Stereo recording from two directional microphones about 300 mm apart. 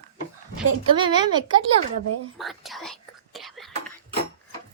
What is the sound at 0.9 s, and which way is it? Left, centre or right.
Speech, centre.